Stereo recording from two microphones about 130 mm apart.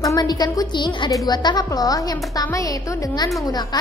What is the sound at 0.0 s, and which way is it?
A woman's voice, 30° left (ahead or behind).